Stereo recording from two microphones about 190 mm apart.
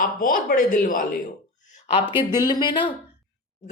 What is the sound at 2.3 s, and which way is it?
Speech, 20° left (ahead or behind).